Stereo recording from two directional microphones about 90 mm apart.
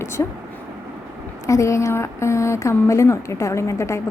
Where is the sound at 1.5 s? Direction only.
35° left (ahead or behind).